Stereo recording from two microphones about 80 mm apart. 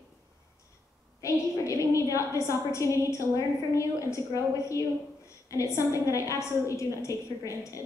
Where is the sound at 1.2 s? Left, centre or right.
Left.